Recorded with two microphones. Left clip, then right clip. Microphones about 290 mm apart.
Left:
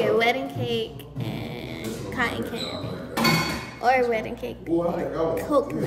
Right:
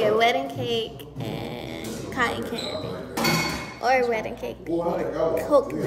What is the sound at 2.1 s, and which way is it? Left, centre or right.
Speech, centre.